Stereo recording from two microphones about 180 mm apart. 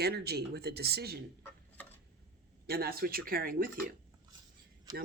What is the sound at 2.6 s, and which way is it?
Speech, 60° right (ahead or behind).